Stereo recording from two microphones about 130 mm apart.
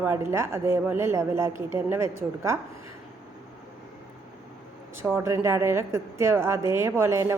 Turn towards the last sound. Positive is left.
turn(degrees=-20)  # may be behind; listen again after turning